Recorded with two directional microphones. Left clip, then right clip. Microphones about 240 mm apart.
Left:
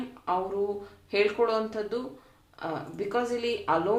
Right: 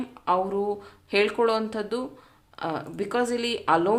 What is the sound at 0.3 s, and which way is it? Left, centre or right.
Speech, right.